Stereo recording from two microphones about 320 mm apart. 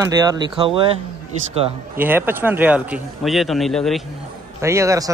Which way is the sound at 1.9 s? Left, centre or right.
Centre.